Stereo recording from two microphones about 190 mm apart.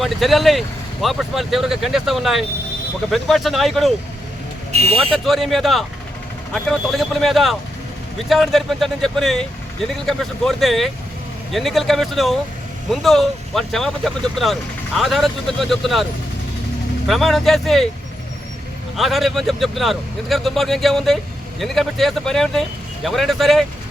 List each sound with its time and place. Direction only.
0.0 s speech: centre (ahead or behind)
4.7 s speech: 35° right (ahead or behind)
5.1 s speech: centre (ahead or behind)
17.1 s speech: centre (ahead or behind)
18.9 s speech: centre (ahead or behind)